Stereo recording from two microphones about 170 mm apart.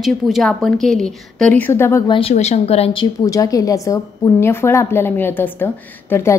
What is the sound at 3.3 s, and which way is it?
A woman's voice, 20° left (ahead or behind).